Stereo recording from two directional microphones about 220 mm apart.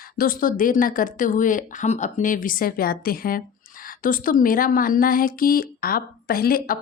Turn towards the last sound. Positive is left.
turn(degrees=40)  # may be behind; listen again after turning